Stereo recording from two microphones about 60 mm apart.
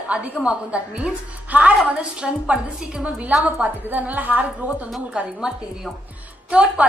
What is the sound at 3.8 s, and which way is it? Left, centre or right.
Speech, right.